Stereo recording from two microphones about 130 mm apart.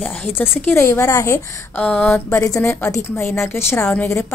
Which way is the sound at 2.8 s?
20° left (ahead or behind).